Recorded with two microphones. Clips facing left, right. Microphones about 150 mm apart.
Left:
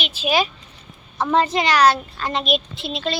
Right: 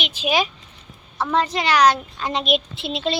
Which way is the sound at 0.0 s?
15° right (ahead or behind).